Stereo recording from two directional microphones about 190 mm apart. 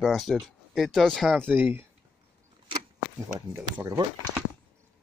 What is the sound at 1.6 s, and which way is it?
Speech, 10° right (ahead or behind).